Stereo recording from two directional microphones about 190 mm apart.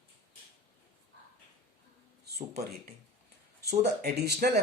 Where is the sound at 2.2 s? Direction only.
55° right (ahead or behind).